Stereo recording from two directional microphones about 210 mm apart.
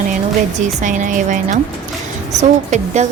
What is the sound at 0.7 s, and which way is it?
Speech, 35° right (ahead or behind).